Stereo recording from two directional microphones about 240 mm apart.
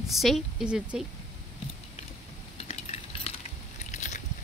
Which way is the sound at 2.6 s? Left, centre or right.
Left.